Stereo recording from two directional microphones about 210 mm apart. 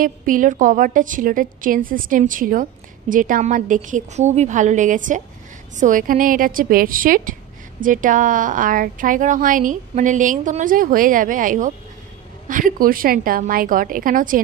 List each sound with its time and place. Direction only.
0.0 s a woman's voice: 40° right (ahead or behind)